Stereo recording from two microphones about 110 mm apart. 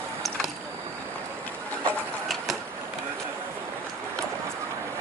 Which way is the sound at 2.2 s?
Centre (ahead or behind).